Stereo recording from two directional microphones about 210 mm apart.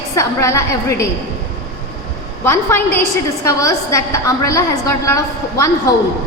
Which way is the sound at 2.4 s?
10° left (ahead or behind).